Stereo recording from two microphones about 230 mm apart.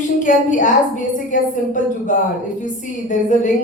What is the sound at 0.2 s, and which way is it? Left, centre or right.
A woman's voice, left.